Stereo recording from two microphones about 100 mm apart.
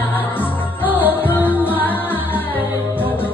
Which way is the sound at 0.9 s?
20° left (ahead or behind).